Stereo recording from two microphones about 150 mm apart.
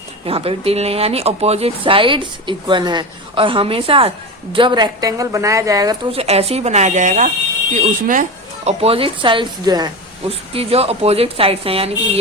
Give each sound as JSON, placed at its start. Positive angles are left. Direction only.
{"t": 0.3, "sound": "a woman's voice", "side_deg": -40}
{"t": 6.1, "sound": "speech", "side_deg": -45}
{"t": 8.6, "sound": "speech", "side_deg": -40}
{"t": 10.2, "sound": "speech", "side_deg": -40}